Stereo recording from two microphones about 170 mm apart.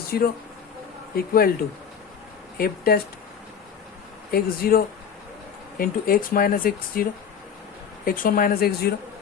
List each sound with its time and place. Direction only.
0.1 s speech: 65° left (ahead or behind)
2.6 s speech: 60° left (ahead or behind)
4.3 s speech: 60° left (ahead or behind)